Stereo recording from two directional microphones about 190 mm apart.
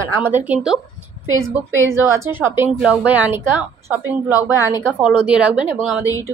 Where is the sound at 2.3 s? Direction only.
10° right (ahead or behind).